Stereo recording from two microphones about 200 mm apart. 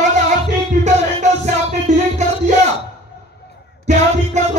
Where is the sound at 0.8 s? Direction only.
35° right (ahead or behind).